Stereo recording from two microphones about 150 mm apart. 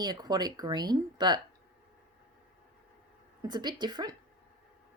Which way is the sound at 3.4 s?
30° right (ahead or behind).